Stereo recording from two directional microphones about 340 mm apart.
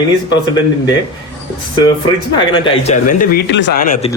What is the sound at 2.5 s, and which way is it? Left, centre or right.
Speech, centre.